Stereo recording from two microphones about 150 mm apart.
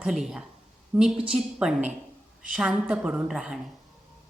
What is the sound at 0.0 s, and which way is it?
A woman's voice, 5° right (ahead or behind).